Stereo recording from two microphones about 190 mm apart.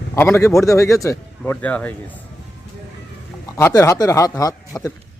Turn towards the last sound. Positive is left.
turn(degrees=20)  # may be behind; listen again after turning